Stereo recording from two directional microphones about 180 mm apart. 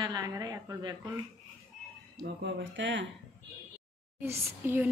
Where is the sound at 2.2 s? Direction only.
80° right.